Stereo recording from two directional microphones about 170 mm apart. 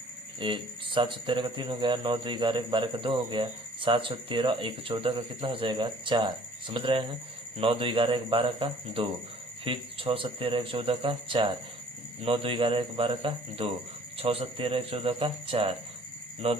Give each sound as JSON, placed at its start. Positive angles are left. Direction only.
{"t": 0.3, "sound": "a man's voice", "side_deg": -30}